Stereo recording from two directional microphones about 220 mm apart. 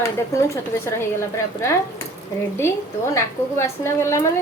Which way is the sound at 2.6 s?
10° left (ahead or behind).